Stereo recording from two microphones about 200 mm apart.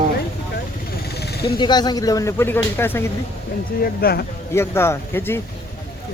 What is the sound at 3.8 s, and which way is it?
Speech, 50° left (ahead or behind).